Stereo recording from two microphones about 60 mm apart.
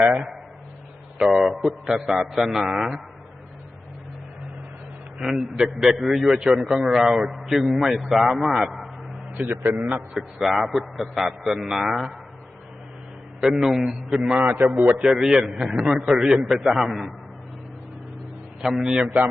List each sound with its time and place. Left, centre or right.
1.2 s a man's voice: centre
5.2 s a man's voice: centre
9.4 s a man's voice: right
10.2 s a man's voice: centre
13.4 s a man's voice: centre
14.1 s a man's voice: centre
14.3 s a man's voice: right
15.1 s a man's voice: centre
18.6 s a man's voice: centre